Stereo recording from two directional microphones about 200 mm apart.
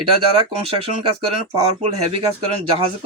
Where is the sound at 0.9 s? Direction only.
30° right (ahead or behind).